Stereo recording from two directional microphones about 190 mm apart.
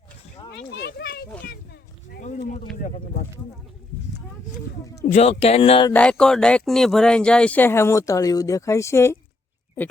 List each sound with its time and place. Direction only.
0.5 s children playing: 60° left (ahead or behind)
2.7 s speech: 40° left (ahead or behind)
5.1 s speech: 35° left (ahead or behind)
5.9 s speech: 5° left (ahead or behind)